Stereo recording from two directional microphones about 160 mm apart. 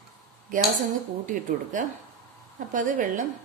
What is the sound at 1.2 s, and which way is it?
A woman's voice, 55° right (ahead or behind).